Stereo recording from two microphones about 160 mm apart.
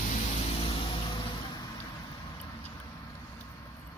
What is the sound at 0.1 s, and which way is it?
Vehicle, 35° left (ahead or behind).